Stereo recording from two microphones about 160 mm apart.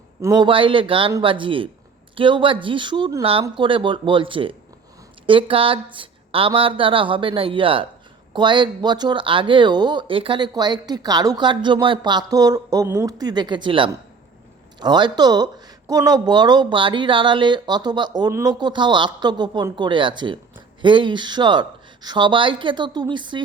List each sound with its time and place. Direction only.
0.2 s speech: 25° right (ahead or behind)